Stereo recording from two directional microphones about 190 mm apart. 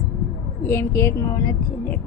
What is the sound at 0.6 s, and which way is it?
A woman's voice, 10° left (ahead or behind).